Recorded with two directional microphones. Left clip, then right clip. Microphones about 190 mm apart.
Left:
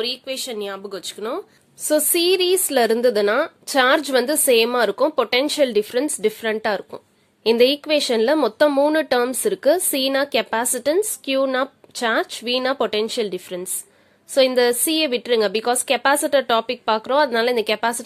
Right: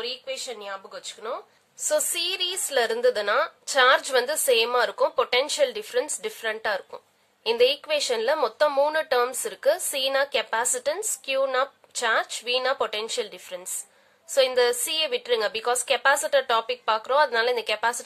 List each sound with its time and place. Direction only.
0.0 s speech: 50° left (ahead or behind)
1.9 s a woman's voice: 30° left (ahead or behind)